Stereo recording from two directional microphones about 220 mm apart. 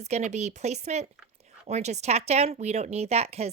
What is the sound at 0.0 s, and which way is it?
A woman's voice, 30° right (ahead or behind).